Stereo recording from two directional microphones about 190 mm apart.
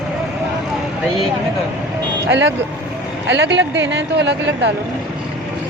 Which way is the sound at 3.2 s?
65° right (ahead or behind).